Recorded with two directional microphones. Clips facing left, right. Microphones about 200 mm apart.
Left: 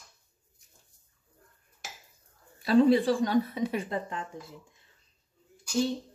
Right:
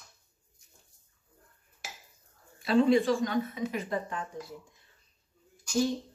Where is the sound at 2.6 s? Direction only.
35° left (ahead or behind).